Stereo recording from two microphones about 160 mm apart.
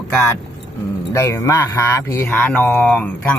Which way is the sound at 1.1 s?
20° left (ahead or behind).